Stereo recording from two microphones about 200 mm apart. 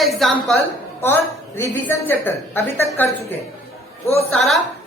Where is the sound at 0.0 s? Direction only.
Centre (ahead or behind).